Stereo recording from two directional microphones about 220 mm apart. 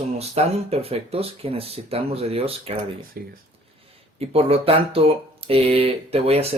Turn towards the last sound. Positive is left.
turn(degrees=-25)  # may be behind; listen again after turning